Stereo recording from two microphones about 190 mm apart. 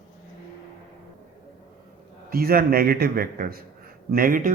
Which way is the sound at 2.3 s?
50° right (ahead or behind).